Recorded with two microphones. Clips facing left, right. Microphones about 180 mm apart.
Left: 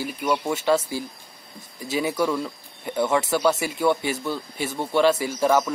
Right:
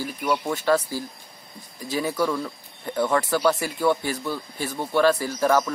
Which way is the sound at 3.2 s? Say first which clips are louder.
Even; 20° left (ahead or behind).